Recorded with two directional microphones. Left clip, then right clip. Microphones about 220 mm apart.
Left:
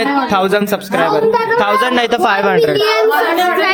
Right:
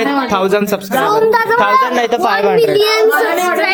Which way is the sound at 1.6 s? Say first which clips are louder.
Right 1 dB; 10° left (ahead or behind).